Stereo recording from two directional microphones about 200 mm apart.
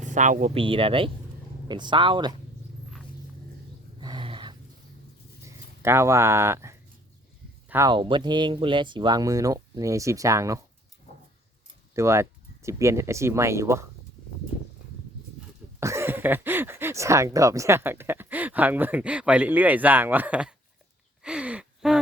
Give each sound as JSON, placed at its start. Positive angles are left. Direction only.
{"t": 0.0, "sound": "speech", "side_deg": -40}
{"t": 4.0, "sound": "a sound", "side_deg": -25}
{"t": 5.4, "sound": "a sound", "side_deg": -15}
{"t": 7.7, "sound": "speech", "side_deg": -15}
{"t": 11.9, "sound": "speech", "side_deg": -15}
{"t": 15.4, "sound": "speech", "side_deg": -15}
{"t": 21.2, "sound": "gasp", "side_deg": -5}